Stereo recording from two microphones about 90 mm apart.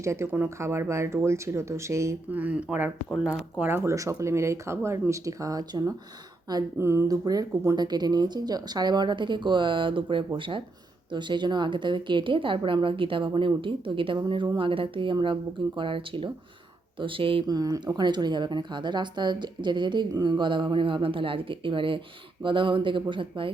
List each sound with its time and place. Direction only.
0.0 s speech: 30° right (ahead or behind)
2.3 s speech: 15° right (ahead or behind)
3.8 s speech: 35° right (ahead or behind)
6.7 s speech: 30° right (ahead or behind)
7.1 s speech: 45° right (ahead or behind)
7.8 s speech: 50° right (ahead or behind); by 10.6 s 70° right (ahead or behind)
11.1 s a woman's voice: 60° right (ahead or behind)
14.3 s speech: 60° right (ahead or behind)
14.7 s a woman's voice: 75° right (ahead or behind)
17.4 s a woman's voice: 45° right (ahead or behind); by 23.5 s 65° right (ahead or behind)